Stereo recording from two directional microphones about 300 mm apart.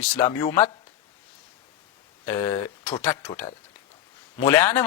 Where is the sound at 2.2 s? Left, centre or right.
Centre.